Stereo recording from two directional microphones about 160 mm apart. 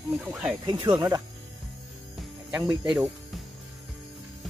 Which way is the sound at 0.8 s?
20° right (ahead or behind).